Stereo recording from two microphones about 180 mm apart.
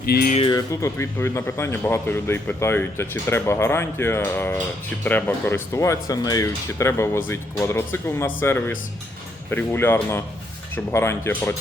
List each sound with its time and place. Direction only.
0.0 s speech: 60° left (ahead or behind)
0.5 s speech: 15° left (ahead or behind)